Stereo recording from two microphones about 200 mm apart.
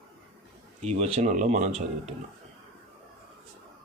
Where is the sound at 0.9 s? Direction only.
30° right (ahead or behind).